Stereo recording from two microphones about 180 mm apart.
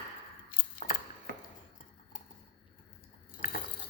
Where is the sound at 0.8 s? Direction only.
40° left (ahead or behind).